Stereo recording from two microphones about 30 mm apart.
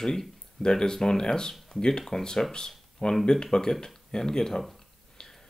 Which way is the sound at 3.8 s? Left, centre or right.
Centre.